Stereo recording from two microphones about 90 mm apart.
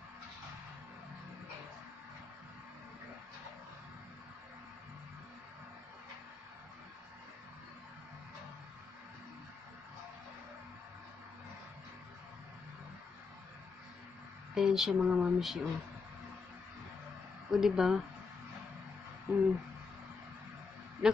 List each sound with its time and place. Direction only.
14.5 s speech: 5° right (ahead or behind)
17.5 s speech: 5° right (ahead or behind)
19.3 s a sound: 20° right (ahead or behind)
21.0 s speech: 5° right (ahead or behind)